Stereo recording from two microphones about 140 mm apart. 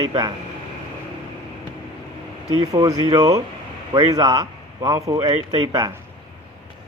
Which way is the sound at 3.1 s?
25° right (ahead or behind).